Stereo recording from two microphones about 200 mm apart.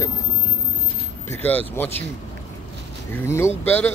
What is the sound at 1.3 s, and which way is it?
Speech, 10° left (ahead or behind).